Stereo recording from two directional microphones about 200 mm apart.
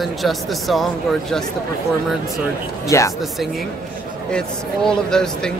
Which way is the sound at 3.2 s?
Centre (ahead or behind).